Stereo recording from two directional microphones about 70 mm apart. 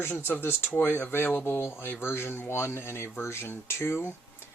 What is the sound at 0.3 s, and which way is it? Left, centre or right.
Speech, left.